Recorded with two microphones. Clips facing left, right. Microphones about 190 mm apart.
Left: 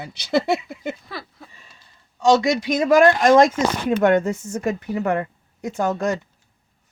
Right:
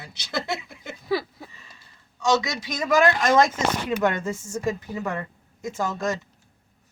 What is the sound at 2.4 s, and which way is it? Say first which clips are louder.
A woman's voice: left 9 dB; 55° left (ahead or behind).